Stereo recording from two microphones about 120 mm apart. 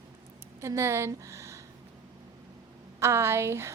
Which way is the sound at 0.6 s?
25° right (ahead or behind).